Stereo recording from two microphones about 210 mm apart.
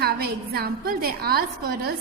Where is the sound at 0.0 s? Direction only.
50° right (ahead or behind).